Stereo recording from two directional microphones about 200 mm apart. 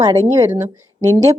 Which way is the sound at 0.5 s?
35° right (ahead or behind).